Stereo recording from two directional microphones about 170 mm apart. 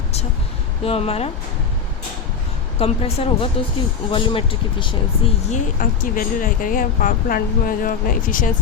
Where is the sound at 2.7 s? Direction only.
35° left (ahead or behind).